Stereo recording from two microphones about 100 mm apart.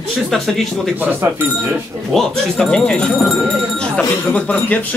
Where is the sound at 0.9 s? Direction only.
20° right (ahead or behind).